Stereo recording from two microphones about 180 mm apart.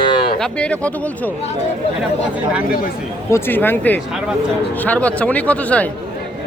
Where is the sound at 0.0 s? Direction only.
25° left (ahead or behind).